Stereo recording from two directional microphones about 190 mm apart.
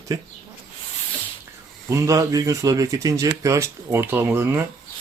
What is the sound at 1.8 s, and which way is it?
Speech, 15° right (ahead or behind).